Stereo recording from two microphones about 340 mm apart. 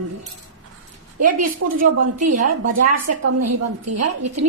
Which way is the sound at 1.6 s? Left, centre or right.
Right.